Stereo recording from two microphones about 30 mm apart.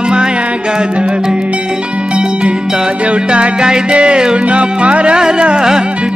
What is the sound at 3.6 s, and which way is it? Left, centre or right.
Music, right.